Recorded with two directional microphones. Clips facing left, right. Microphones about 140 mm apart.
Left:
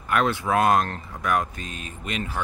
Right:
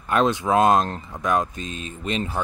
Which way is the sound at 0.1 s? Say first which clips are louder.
Right 3 dB; 20° right (ahead or behind).